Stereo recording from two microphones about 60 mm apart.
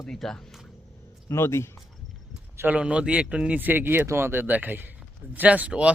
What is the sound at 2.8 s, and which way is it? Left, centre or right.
Speech, centre.